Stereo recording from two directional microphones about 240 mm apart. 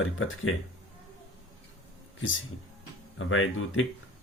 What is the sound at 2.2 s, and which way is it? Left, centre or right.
Speech, left.